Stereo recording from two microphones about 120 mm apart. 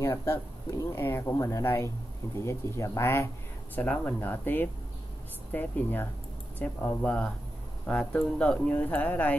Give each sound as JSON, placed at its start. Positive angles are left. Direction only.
{"t": 0.0, "sound": "speech", "side_deg": 25}